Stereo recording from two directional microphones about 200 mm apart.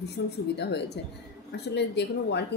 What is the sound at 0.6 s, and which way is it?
A woman's voice, 55° left (ahead or behind).